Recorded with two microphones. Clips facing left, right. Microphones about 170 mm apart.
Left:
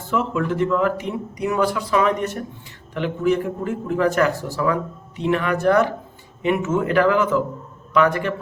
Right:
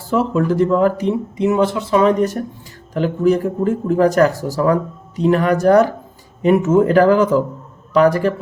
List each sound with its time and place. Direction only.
0.1 s speech: 35° right (ahead or behind)